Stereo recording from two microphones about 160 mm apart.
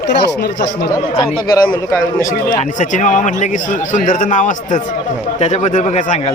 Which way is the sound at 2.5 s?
50° left (ahead or behind).